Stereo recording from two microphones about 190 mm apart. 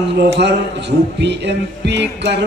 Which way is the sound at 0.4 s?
65° right (ahead or behind).